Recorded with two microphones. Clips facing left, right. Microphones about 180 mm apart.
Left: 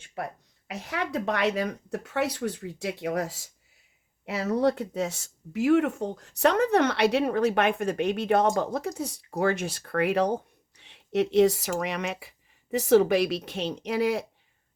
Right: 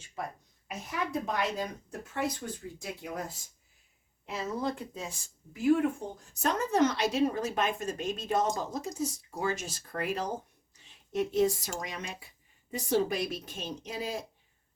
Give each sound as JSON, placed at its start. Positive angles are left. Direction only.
{"t": 0.0, "sound": "speech", "side_deg": 65}